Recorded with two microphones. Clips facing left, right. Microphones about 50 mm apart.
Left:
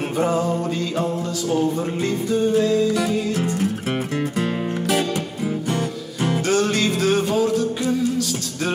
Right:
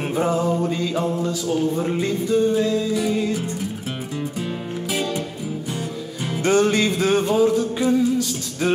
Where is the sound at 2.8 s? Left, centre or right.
Left.